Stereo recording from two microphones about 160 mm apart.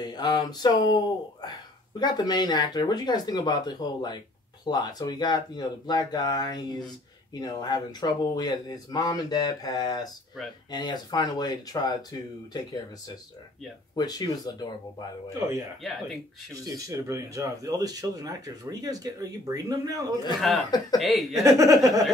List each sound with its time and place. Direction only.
0.0 s speech: 25° left (ahead or behind)
13.9 s speech: 25° left (ahead or behind)
16.5 s speech: 20° right (ahead or behind)
20.3 s speech: centre (ahead or behind)
21.4 s speech: 20° right (ahead or behind)